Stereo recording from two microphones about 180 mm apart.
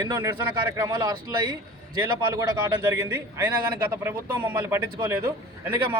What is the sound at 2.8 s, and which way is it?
A man's voice, 10° right (ahead or behind).